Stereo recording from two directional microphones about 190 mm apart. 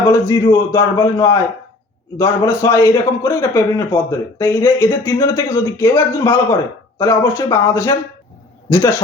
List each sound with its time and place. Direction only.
0.1 s a man's voice: 15° left (ahead or behind)